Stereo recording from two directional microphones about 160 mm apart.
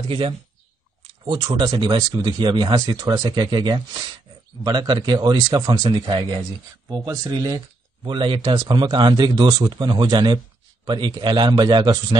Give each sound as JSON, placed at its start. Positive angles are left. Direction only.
{"t": 0.1, "sound": "speech", "side_deg": -30}